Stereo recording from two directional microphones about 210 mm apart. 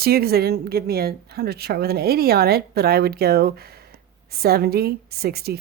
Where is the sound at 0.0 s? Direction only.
45° right (ahead or behind).